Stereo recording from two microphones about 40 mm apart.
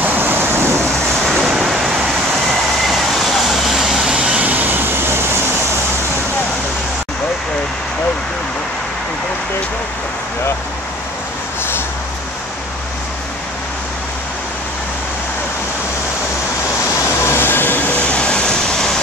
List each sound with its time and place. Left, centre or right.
0.0 s waves: right
1.4 s vehicle: centre
2.9 s vehicle: centre; by 4.4 s right
4.4 s vehicle: right
17.3 s vehicle: left
18.0 s vehicle: left